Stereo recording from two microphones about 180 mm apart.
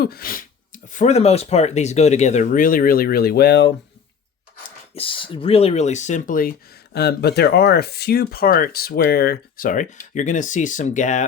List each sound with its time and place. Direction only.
0.0 s speech: 55° left (ahead or behind)
4.9 s speech: 30° left (ahead or behind); by 6.5 s 50° left (ahead or behind)
6.9 s speech: 65° left (ahead or behind); by 11.3 s 45° left (ahead or behind)